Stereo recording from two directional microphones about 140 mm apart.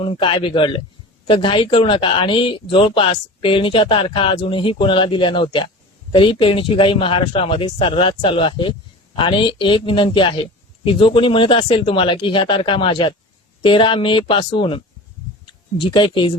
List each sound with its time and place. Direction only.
0.0 s speech: 40° left (ahead or behind)
15.8 s speech: 35° left (ahead or behind)